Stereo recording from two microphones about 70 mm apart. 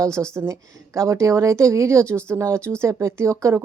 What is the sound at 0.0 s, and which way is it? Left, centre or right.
A woman's voice, right.